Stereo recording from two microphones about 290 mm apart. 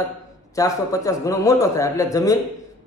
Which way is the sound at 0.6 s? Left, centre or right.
Centre.